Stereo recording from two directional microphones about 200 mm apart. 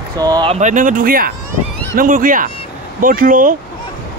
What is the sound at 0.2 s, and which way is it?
Speech, 20° right (ahead or behind).